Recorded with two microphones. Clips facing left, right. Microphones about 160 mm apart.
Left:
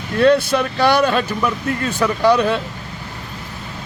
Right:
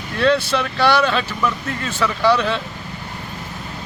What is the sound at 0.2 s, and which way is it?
Speech, 45° left (ahead or behind).